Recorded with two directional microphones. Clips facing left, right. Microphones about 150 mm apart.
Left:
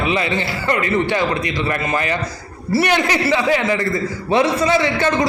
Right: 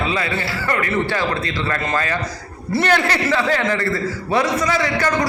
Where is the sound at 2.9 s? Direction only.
15° left (ahead or behind).